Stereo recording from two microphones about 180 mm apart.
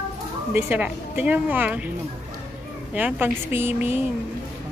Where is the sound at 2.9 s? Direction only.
10° right (ahead or behind).